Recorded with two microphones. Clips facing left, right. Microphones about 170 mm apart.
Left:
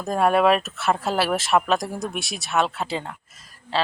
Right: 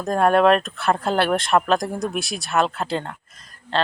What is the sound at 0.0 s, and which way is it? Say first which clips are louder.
Speech: right 2 dB; 5° left (ahead or behind).